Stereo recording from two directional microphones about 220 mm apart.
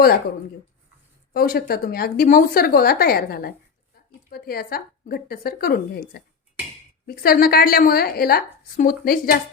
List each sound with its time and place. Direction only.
1.3 s a woman's voice: 45° left (ahead or behind)